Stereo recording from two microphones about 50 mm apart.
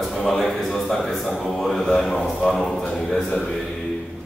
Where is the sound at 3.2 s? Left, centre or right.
Centre.